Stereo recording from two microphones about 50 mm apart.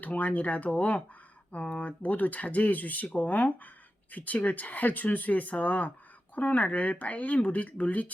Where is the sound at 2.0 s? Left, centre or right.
Left.